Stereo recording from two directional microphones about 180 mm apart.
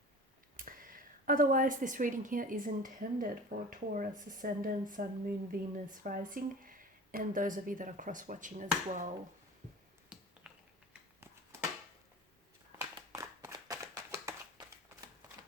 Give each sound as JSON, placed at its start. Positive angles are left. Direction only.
{"t": 0.5, "sound": "speech", "side_deg": -50}
{"t": 10.1, "sound": "finger snapping", "side_deg": -5}
{"t": 12.8, "sound": "a sound", "side_deg": -20}